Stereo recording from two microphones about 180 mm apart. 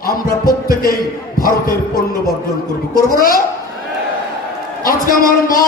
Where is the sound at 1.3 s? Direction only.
55° left (ahead or behind).